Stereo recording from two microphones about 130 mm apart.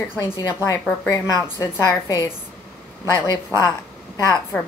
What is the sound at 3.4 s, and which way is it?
Speech, 25° left (ahead or behind).